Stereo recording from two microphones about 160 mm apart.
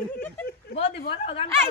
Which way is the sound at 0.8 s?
35° left (ahead or behind).